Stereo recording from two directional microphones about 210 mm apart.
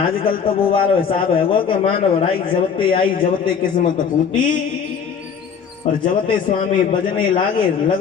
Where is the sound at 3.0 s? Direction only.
40° left (ahead or behind).